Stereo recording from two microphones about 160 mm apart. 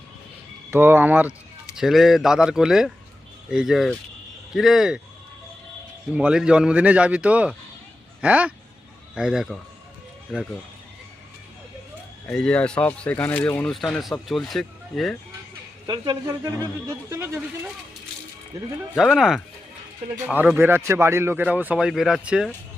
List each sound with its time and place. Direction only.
0.7 s speech: 15° right (ahead or behind)
6.1 s speech: 5° right (ahead or behind)
12.3 s speech: 5° left (ahead or behind)
13.7 s speech: centre (ahead or behind)
15.9 s speech: 25° right (ahead or behind)
18.9 s speech: centre (ahead or behind)